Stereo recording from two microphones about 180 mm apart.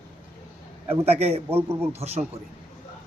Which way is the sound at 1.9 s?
35° right (ahead or behind).